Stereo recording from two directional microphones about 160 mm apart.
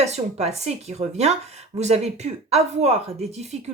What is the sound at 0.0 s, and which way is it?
Speech, 45° right (ahead or behind).